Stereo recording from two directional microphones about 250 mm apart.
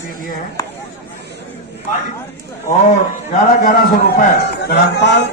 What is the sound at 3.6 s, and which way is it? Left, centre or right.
A man's voice, left.